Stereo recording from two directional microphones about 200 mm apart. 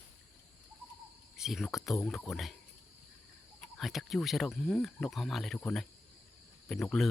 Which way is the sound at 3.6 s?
Centre (ahead or behind).